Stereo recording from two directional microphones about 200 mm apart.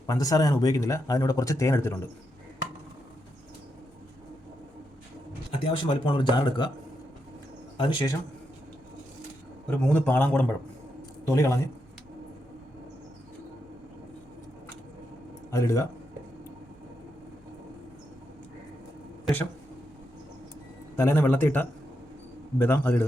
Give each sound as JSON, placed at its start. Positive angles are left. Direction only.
{"t": 0.1, "sound": "speech", "side_deg": 15}
{"t": 5.5, "sound": "speech", "side_deg": 25}
{"t": 7.8, "sound": "speech", "side_deg": 25}
{"t": 9.6, "sound": "speech", "side_deg": 10}
{"t": 15.5, "sound": "speech", "side_deg": 15}
{"t": 19.2, "sound": "speech", "side_deg": 10}
{"t": 20.9, "sound": "speech", "side_deg": 10}